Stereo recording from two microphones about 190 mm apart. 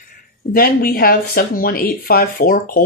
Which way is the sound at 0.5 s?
50° left (ahead or behind).